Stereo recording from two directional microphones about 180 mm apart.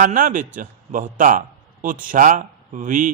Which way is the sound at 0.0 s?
45° right (ahead or behind).